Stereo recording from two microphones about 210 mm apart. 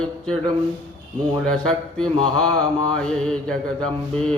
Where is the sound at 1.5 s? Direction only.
5° left (ahead or behind).